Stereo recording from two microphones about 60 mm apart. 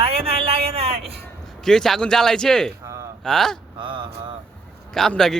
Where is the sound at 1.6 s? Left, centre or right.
Centre.